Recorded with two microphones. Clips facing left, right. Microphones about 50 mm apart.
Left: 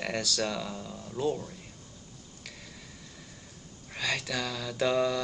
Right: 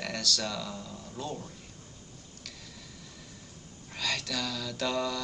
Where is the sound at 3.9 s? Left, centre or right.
Centre.